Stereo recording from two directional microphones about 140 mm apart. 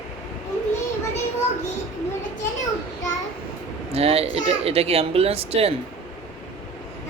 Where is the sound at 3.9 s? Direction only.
45° right (ahead or behind).